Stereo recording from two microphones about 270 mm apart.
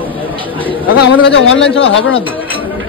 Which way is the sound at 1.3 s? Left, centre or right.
Left.